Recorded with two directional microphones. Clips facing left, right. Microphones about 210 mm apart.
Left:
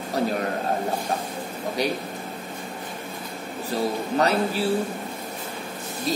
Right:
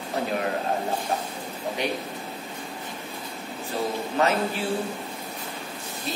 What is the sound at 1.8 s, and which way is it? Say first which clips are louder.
Speech: left 3 dB; 40° left (ahead or behind).